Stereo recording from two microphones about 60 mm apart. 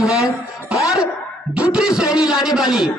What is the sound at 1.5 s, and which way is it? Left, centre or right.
A man's voice, centre.